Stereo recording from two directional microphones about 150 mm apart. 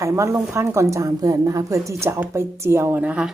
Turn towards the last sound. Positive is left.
turn(degrees=-10)  # may be behind; listen again after turning